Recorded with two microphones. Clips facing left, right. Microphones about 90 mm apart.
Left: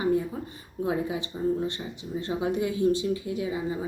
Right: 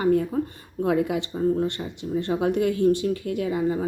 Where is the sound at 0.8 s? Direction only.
70° right (ahead or behind).